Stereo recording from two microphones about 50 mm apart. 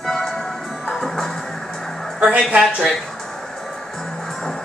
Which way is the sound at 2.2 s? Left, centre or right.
Right.